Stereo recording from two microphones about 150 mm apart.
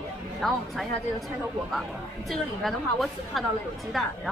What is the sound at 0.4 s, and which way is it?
A woman's voice, centre (ahead or behind).